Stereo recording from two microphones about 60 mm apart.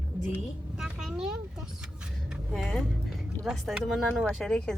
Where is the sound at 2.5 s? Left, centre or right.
Centre.